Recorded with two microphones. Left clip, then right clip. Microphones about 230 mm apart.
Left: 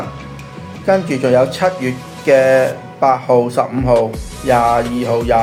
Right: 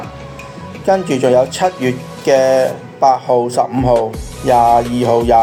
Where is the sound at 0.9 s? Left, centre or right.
Right.